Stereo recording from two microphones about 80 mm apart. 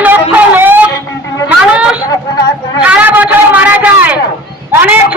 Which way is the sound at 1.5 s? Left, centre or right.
Centre.